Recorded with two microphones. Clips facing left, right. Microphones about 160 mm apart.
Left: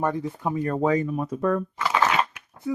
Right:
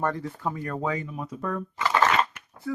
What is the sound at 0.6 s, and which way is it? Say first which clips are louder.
Speech: left 10 dB; 40° left (ahead or behind).